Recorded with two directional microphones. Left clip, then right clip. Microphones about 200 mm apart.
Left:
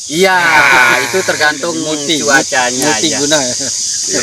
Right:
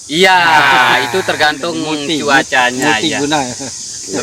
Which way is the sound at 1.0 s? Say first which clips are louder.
Left 1 dB; 40° right (ahead or behind).